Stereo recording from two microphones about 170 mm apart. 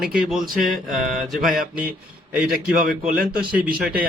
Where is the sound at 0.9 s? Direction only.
Centre (ahead or behind).